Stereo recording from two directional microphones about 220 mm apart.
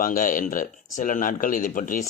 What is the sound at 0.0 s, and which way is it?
Speech, 40° left (ahead or behind).